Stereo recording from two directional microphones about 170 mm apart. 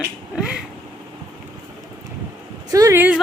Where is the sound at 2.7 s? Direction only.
15° right (ahead or behind).